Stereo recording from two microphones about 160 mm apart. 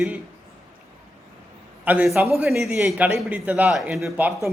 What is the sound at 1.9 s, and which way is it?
A man's voice, 5° right (ahead or behind).